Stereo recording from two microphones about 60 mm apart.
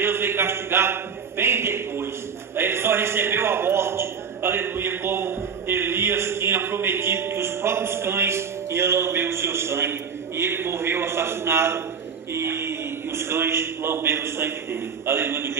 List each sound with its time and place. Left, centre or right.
0.0 s a man's voice: right